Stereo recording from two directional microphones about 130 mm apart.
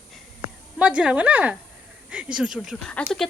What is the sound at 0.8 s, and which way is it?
Speech, 10° right (ahead or behind).